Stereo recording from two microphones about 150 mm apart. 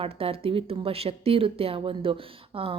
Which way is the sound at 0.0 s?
40° right (ahead or behind).